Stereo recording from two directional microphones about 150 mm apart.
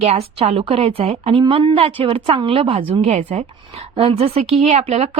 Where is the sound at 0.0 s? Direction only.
40° right (ahead or behind).